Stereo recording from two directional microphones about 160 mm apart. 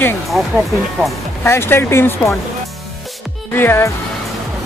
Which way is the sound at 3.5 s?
15° left (ahead or behind).